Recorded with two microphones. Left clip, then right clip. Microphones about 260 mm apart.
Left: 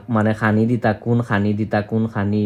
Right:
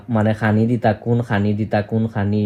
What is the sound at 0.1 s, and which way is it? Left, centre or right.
Speech, centre.